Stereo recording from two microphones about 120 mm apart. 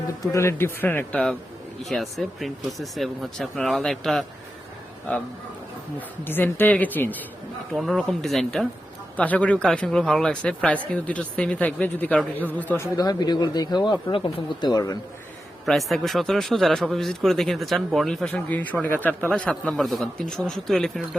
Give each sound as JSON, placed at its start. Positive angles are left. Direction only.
{"t": 0.2, "sound": "a man's voice", "side_deg": 25}
{"t": 6.2, "sound": "a man's voice", "side_deg": 15}
{"t": 7.7, "sound": "a man's voice", "side_deg": 0}
{"t": 13.0, "sound": "speech", "side_deg": 35}
{"t": 15.6, "sound": "speech", "side_deg": 0}
{"t": 18.3, "sound": "a man's voice", "side_deg": 15}